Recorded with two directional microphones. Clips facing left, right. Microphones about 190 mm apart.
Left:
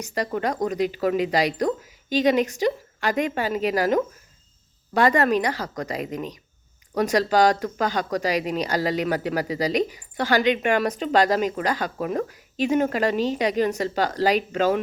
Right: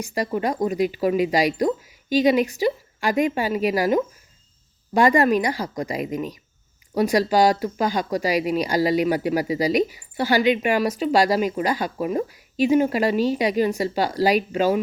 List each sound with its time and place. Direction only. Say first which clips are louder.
0.0 s speech: right 2 dB; 10° right (ahead or behind)